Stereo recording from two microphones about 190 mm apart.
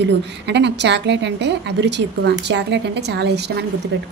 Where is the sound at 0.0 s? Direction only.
65° right (ahead or behind).